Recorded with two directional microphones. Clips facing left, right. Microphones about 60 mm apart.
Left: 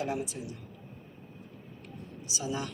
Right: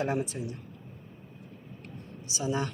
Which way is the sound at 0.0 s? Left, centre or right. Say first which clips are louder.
Right 3 dB; right.